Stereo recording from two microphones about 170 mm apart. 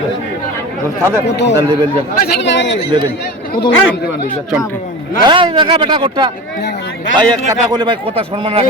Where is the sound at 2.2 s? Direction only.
90° left.